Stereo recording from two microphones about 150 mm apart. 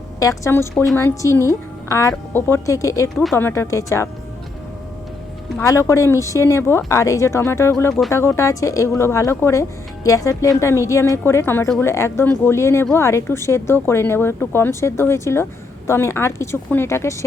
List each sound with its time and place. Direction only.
0.2 s speech: 20° left (ahead or behind)
5.5 s speech: 20° left (ahead or behind)